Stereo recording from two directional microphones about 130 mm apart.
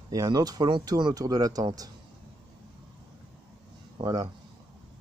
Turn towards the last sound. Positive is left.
turn(degrees=-30)  # may be behind; listen again after turning